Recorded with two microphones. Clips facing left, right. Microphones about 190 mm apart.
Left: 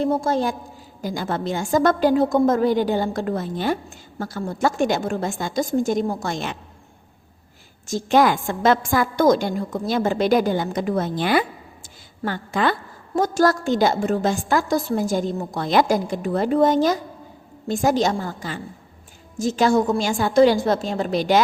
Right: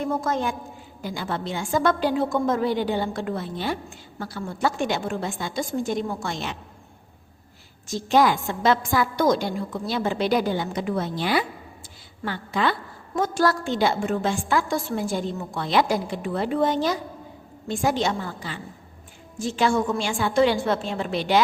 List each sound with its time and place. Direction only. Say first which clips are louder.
0.0 s a woman's voice: left 4 dB; 30° left (ahead or behind); by 6.6 s 50° left (ahead or behind)
7.9 s a woman's voice: left 2 dB; 50° left (ahead or behind)